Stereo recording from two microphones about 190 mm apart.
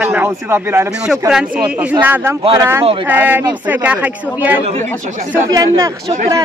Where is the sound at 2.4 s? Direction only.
25° right (ahead or behind).